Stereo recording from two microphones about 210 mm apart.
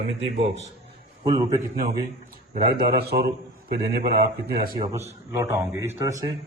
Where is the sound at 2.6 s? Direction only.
45° right (ahead or behind).